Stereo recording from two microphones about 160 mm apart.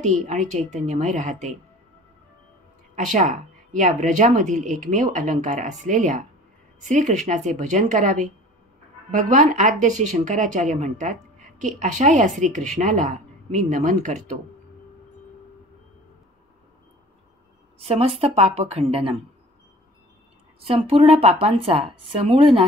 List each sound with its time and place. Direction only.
0.0 s speech: 50° right (ahead or behind)
3.0 s speech: 50° right (ahead or behind)
17.7 s speech: 40° right (ahead or behind)
20.6 s speech: 40° right (ahead or behind)